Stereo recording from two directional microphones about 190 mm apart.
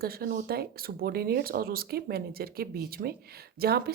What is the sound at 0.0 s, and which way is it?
Speech, 50° right (ahead or behind).